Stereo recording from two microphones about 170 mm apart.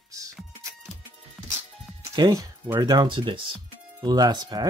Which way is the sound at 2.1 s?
25° right (ahead or behind).